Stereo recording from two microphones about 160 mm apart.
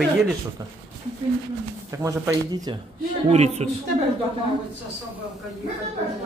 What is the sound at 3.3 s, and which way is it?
Speech, 45° right (ahead or behind).